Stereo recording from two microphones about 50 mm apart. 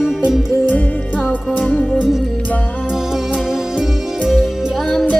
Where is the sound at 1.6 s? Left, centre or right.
Left.